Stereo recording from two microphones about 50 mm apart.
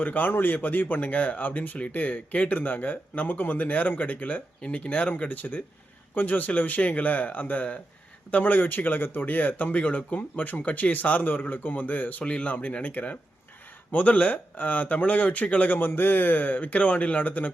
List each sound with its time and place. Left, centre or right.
0.0 s speech: left
12.2 s speech: left